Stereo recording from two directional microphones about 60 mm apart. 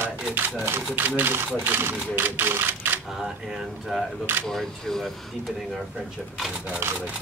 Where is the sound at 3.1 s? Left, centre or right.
Centre.